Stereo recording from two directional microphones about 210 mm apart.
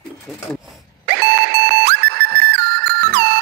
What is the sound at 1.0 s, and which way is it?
Music, 50° right (ahead or behind).